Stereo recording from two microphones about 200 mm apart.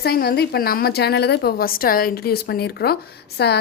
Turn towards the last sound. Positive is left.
turn(degrees=55)  # may be behind; listen again after turning